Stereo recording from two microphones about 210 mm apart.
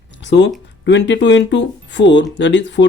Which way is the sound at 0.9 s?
55° left (ahead or behind).